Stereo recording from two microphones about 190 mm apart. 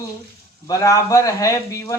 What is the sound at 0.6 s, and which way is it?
A man's voice, 15° left (ahead or behind).